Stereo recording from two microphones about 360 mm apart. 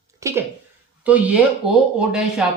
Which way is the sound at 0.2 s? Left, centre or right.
Centre.